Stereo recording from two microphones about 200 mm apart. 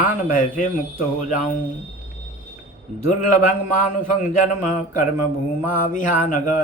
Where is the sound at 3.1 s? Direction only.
40° left (ahead or behind).